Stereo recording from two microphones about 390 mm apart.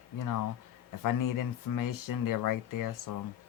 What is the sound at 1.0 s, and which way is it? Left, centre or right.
Speech, left.